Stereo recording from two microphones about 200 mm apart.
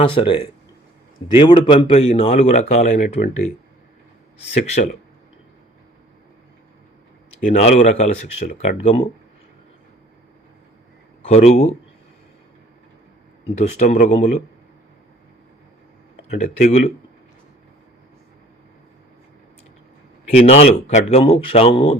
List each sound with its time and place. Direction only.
0.0 s speech: 25° left (ahead or behind)
4.8 s speech: 45° left (ahead or behind)
7.4 s speech: 35° left (ahead or behind)
11.2 s speech: 30° left (ahead or behind)
13.7 s speech: 35° left (ahead or behind)
16.3 s speech: 35° left (ahead or behind)
20.4 s speech: 30° left (ahead or behind)